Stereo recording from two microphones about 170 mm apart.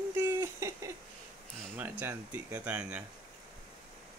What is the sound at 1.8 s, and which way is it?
Speech, 10° right (ahead or behind).